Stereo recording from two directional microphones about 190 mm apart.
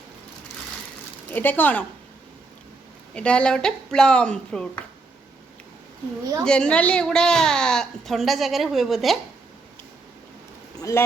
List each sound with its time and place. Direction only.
1.3 s a woman's voice: 10° left (ahead or behind)
3.2 s a woman's voice: 5° left (ahead or behind)
6.4 s a woman's voice: 5° left (ahead or behind)
10.8 s a sound: 15° left (ahead or behind)